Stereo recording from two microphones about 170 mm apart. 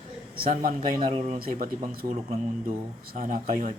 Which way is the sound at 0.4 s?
55° right (ahead or behind).